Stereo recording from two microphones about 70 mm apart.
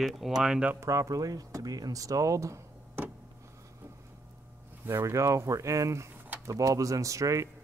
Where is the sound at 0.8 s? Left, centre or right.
Right.